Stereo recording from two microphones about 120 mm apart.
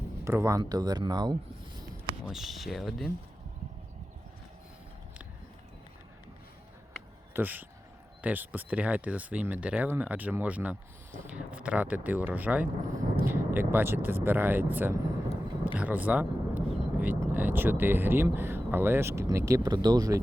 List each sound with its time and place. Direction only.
0.3 s speech: 25° right (ahead or behind)
0.6 s speech: 35° right (ahead or behind)
2.2 s speech: centre (ahead or behind)
7.3 s speech: 15° right (ahead or behind); by 20.1 s 30° right (ahead or behind)